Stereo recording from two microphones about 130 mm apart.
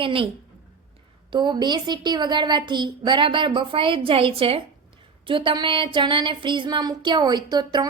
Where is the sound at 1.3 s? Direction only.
35° right (ahead or behind).